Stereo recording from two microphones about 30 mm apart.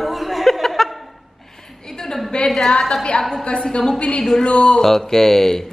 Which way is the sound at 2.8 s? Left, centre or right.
Centre.